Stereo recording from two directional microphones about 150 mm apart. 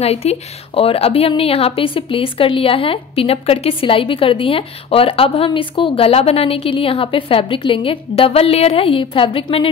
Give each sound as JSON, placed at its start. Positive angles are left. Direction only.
{"t": 0.0, "sound": "a woman's voice", "side_deg": 45}